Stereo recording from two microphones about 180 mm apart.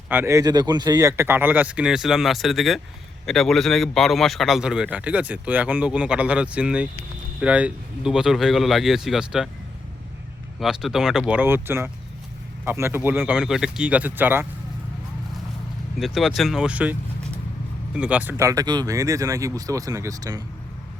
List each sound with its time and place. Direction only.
0.1 s speech: 15° right (ahead or behind)
10.6 s speech: centre (ahead or behind)
16.0 s speech: centre (ahead or behind); by 20.4 s 20° right (ahead or behind)